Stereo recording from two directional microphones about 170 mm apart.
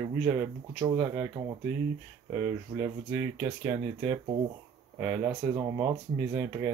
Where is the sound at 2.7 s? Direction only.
20° right (ahead or behind).